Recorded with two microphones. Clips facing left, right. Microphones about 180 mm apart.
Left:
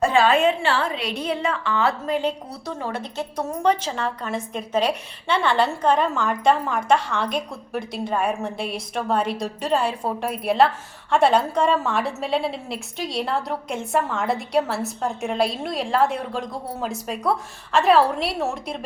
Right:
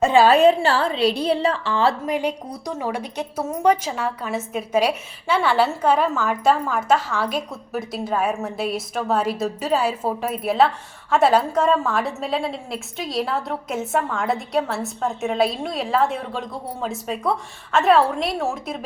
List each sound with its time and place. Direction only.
0.3 s a woman's voice: 40° right (ahead or behind)
2.0 s a woman's voice: 15° right (ahead or behind)